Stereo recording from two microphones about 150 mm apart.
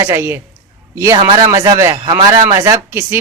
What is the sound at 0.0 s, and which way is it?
Speech, 15° right (ahead or behind).